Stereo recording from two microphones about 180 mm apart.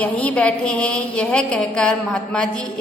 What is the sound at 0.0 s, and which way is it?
A woman's voice, 10° left (ahead or behind).